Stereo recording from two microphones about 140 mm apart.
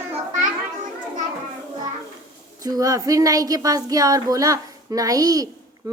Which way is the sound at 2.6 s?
25° right (ahead or behind).